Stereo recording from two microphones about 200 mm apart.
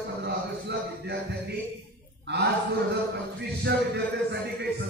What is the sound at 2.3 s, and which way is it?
Speech, 60° right (ahead or behind).